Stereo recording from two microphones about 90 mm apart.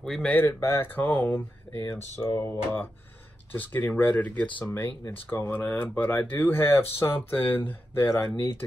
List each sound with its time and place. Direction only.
0.0 s speech: 5° left (ahead or behind)
0.5 s speech: 30° left (ahead or behind)
1.8 s speech: 35° left (ahead or behind)